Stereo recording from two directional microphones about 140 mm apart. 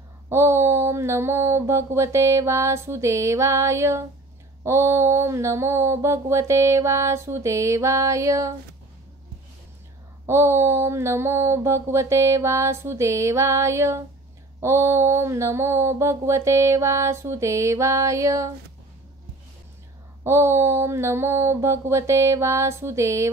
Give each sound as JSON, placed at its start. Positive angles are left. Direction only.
{"t": 0.3, "sound": "mantra", "side_deg": -20}
{"t": 10.2, "sound": "mantra", "side_deg": -20}
{"t": 20.2, "sound": "mantra", "side_deg": -20}